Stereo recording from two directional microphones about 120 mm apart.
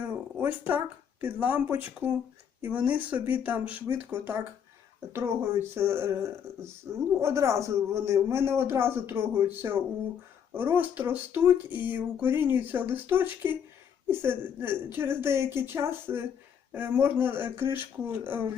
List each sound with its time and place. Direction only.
0.3 s speech: 15° right (ahead or behind)